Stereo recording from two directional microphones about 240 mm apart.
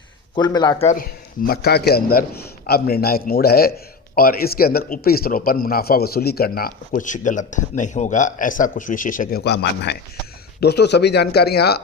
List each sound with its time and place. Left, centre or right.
0.3 s speech: centre
0.9 s a man's voice: left